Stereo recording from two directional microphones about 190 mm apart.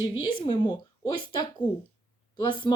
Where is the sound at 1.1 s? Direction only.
25° left (ahead or behind).